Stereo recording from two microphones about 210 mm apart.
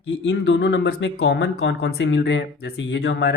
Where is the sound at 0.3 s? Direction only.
55° left (ahead or behind).